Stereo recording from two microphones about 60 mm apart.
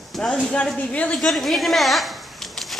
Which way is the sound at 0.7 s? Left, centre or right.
Left.